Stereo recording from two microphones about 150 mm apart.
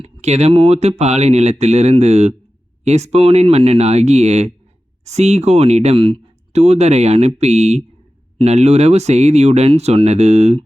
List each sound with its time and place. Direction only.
0.0 s speech: 45° right (ahead or behind)